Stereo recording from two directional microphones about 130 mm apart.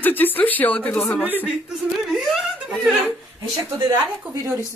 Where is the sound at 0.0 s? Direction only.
15° left (ahead or behind).